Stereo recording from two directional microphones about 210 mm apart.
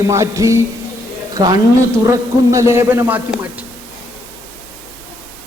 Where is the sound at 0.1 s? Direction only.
15° right (ahead or behind).